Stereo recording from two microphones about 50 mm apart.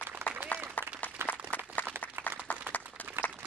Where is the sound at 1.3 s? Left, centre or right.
Left.